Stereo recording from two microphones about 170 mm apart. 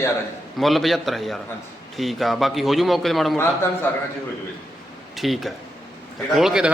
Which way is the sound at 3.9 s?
15° left (ahead or behind).